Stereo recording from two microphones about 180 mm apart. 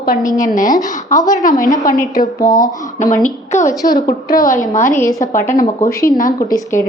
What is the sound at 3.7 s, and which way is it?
Speech, 20° left (ahead or behind).